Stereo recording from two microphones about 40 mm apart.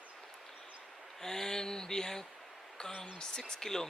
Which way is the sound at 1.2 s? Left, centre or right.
Centre.